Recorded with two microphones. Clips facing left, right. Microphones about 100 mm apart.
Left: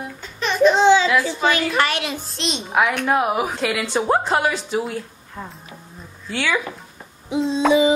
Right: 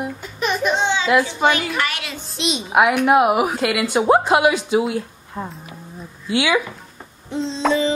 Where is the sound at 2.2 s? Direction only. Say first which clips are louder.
Right 3 dB; centre (ahead or behind); by 5.5 s 20° right (ahead or behind).